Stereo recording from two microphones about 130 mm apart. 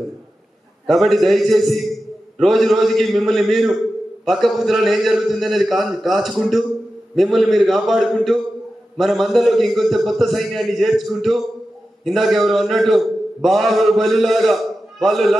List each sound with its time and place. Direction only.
0.8 s a man's voice: centre (ahead or behind)